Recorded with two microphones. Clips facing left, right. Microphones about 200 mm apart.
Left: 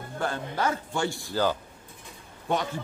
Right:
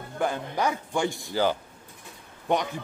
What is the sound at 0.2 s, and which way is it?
A man's voice, 15° right (ahead or behind).